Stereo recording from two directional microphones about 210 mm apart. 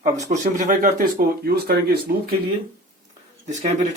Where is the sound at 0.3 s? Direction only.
35° right (ahead or behind).